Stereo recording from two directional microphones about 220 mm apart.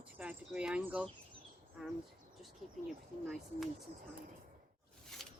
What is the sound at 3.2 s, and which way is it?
Speech, centre (ahead or behind).